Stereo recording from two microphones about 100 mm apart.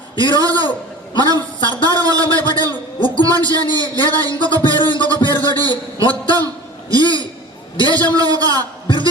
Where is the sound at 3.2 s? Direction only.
40° right (ahead or behind).